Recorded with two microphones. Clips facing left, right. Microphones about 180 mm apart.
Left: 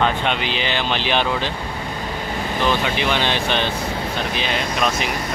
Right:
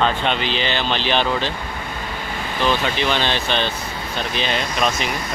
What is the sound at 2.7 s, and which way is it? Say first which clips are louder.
Speech: right 1 dB; 10° left (ahead or behind).